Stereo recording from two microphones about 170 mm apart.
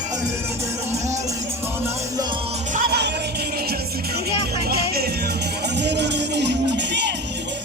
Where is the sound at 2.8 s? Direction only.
70° right (ahead or behind).